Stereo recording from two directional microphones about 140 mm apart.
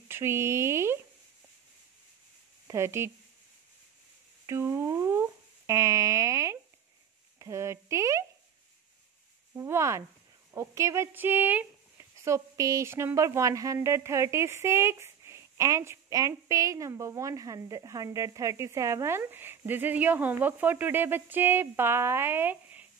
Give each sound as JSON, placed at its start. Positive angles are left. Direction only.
{"t": 0.1, "sound": "speech", "side_deg": -20}
{"t": 2.7, "sound": "speech", "side_deg": -20}
{"t": 4.5, "sound": "speech", "side_deg": -20}
{"t": 9.6, "sound": "speech", "side_deg": -20}